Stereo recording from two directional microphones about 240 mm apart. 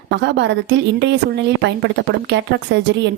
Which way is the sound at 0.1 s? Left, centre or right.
Right.